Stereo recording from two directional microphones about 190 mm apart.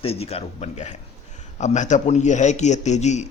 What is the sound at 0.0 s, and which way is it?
A man's voice, 30° left (ahead or behind).